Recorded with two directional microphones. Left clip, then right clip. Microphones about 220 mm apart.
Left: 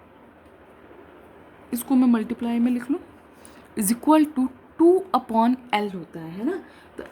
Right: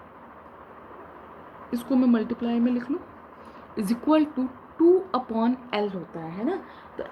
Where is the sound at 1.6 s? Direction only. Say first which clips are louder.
Left 2 dB; 65° left (ahead or behind).